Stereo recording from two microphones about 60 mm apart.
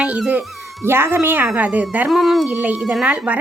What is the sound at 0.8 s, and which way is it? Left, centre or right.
A woman's voice, right.